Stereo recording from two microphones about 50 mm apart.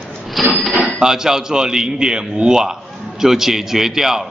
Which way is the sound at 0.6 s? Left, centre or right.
Centre.